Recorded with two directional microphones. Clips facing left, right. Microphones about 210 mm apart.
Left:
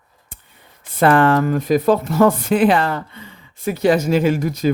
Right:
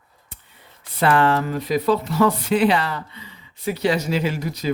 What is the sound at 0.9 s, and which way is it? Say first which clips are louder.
Speech: left 4 dB; 50° left (ahead or behind).